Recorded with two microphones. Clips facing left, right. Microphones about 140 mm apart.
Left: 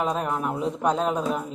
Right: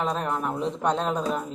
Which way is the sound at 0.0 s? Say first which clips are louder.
Left 1 dB; 5° left (ahead or behind).